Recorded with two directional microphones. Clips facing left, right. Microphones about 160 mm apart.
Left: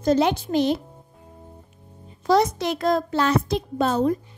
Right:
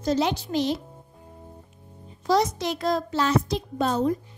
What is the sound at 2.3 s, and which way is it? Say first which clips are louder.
A child's voice: left 3 dB; 55° left (ahead or behind).